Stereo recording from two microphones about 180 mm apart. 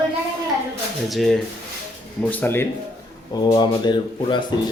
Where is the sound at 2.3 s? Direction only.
10° left (ahead or behind).